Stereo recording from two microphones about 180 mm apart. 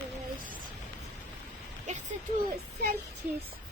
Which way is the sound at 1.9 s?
40° right (ahead or behind).